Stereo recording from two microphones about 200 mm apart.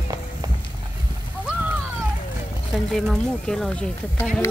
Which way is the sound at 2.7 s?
Centre (ahead or behind).